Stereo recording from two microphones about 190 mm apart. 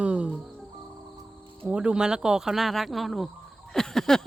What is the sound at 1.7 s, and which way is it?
Speech, 5° right (ahead or behind).